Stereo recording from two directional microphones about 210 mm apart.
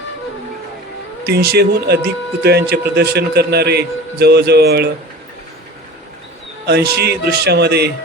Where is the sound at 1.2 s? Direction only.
50° right (ahead or behind).